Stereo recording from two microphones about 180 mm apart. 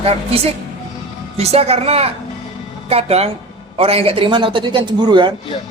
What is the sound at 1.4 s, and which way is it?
A woman's voice, 35° right (ahead or behind).